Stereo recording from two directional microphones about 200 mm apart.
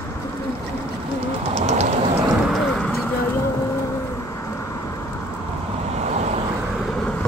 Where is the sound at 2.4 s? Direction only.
Centre (ahead or behind).